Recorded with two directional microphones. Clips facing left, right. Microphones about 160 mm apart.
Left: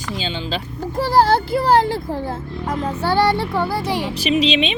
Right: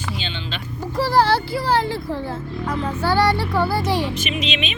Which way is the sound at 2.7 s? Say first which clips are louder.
Left 1 dB; 30° left (ahead or behind).